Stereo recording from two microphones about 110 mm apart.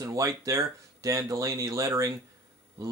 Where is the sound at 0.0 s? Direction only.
25° right (ahead or behind).